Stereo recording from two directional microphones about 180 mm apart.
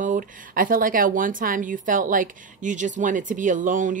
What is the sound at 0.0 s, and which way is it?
A woman's voice, 45° right (ahead or behind).